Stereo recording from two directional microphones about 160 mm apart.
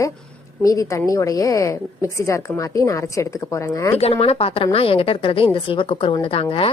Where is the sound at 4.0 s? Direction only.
35° left (ahead or behind).